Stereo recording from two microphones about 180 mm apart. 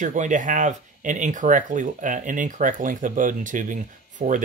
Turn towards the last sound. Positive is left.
turn(degrees=-45)  # may be behind; listen again after turning